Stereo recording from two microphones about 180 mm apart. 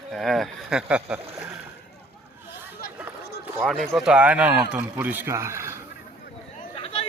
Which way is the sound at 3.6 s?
Centre (ahead or behind).